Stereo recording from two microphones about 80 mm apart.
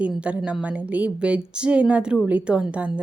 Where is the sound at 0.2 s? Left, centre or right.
Centre.